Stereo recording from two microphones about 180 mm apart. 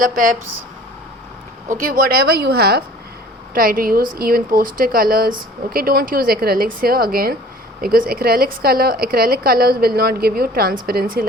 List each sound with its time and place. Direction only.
0.0 s speech: 50° right (ahead or behind)
1.7 s speech: 50° right (ahead or behind)
3.5 s speech: 55° right (ahead or behind)